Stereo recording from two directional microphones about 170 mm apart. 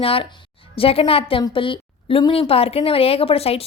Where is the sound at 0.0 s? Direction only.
35° left (ahead or behind).